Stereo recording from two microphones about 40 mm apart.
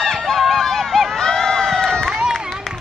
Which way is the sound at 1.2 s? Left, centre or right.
Centre.